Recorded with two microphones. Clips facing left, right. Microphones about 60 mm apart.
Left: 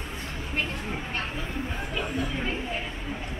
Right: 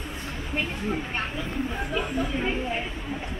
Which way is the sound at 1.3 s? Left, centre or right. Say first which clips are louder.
Right 3 dB; centre.